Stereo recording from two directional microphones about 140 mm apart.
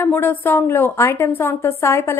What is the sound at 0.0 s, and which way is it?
A woman's voice, 15° left (ahead or behind).